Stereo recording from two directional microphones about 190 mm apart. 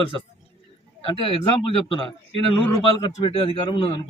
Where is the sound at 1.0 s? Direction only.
25° left (ahead or behind).